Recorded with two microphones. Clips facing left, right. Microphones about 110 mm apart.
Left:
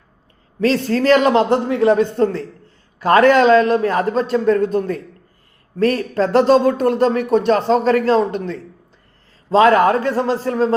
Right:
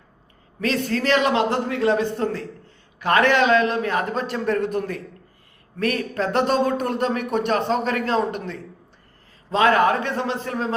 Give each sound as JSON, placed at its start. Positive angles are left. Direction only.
{"t": 0.6, "sound": "a man's voice", "side_deg": 35}
{"t": 9.5, "sound": "a man's voice", "side_deg": 35}